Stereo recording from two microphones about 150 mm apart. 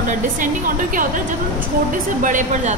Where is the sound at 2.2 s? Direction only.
60° right (ahead or behind).